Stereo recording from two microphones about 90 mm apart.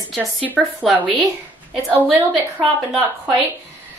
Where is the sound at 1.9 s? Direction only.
15° right (ahead or behind).